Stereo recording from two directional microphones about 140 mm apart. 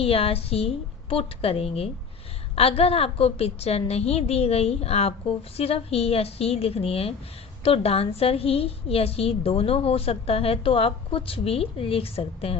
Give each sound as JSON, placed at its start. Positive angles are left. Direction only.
{"t": 0.0, "sound": "a woman's voice", "side_deg": 45}